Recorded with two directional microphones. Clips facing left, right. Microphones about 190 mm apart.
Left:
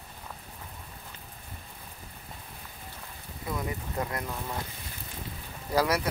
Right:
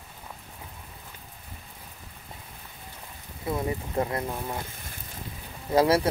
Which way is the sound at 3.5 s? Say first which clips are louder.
Right 5 dB; 25° right (ahead or behind).